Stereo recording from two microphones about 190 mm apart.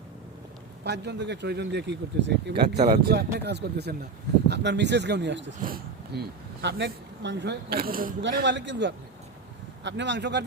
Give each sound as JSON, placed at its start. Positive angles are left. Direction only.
{"t": 0.9, "sound": "speech", "side_deg": -65}
{"t": 5.6, "sound": "speech", "side_deg": -55}
{"t": 8.3, "sound": "a man's voice", "side_deg": -60}